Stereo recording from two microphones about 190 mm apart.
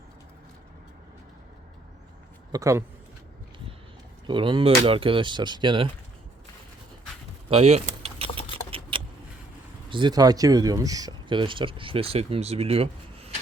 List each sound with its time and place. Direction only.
2.5 s a man's voice: 15° right (ahead or behind)
4.3 s speech: 25° right (ahead or behind)
7.5 s keys jangling: 35° right (ahead or behind)
8.7 s vehicle: 25° right (ahead or behind)
9.9 s speech: 25° right (ahead or behind)